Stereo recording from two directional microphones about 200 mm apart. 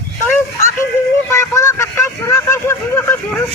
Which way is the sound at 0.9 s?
10° left (ahead or behind).